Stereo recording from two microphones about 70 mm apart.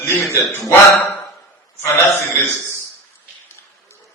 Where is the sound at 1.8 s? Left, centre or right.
Left.